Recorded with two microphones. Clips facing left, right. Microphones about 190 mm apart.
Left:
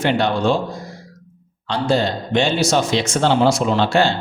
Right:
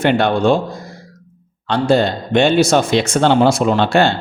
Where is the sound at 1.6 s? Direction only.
55° right (ahead or behind).